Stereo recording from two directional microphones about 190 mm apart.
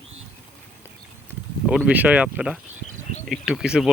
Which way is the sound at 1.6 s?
5° right (ahead or behind).